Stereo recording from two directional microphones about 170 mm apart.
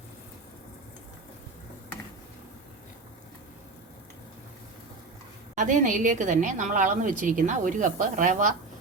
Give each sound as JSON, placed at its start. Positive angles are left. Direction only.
{"t": 5.5, "sound": "a woman's voice", "side_deg": -50}